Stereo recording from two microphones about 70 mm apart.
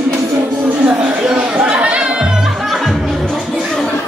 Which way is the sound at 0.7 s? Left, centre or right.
Centre.